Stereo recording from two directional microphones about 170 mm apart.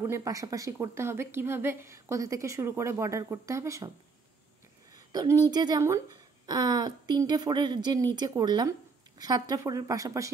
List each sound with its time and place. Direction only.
0.0 s speech: 15° right (ahead or behind)
5.1 s a woman's voice: 25° right (ahead or behind)